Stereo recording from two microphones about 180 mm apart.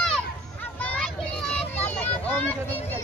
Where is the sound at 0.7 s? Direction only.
5° left (ahead or behind).